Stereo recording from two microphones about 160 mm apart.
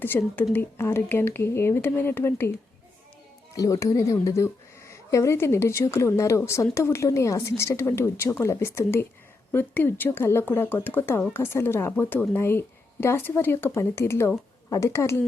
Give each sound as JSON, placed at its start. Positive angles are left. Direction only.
{"t": 0.0, "sound": "speech", "side_deg": 15}
{"t": 3.5, "sound": "a woman's voice", "side_deg": 20}